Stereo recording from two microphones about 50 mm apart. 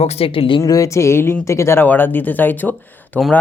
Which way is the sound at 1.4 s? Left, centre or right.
Left.